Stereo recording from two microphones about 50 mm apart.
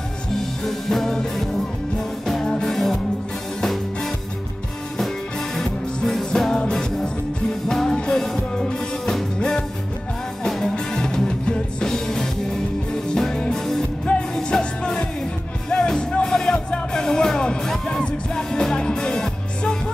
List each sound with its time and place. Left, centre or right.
0.7 s music: centre
2.4 s music: centre
2.7 s music: centre
6.5 s music: centre
10.4 s music: centre